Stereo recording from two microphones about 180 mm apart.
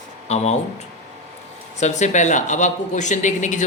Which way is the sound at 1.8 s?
40° left (ahead or behind).